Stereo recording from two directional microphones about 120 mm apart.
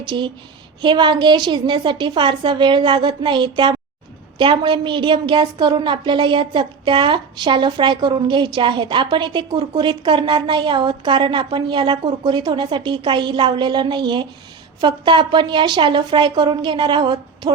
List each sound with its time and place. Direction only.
0.1 s a woman's voice: 45° right (ahead or behind)